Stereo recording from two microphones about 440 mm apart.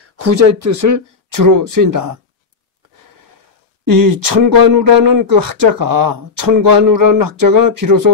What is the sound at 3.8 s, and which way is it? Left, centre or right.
Speech, right.